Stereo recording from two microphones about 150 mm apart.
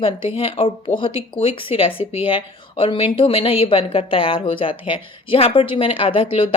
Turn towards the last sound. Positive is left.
turn(degrees=40)  # may be behind; listen again after turning